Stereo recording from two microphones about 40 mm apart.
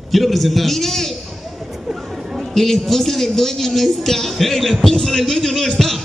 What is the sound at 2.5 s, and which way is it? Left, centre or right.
A man's voice, centre.